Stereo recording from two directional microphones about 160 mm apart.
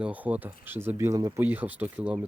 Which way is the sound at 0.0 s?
10° right (ahead or behind).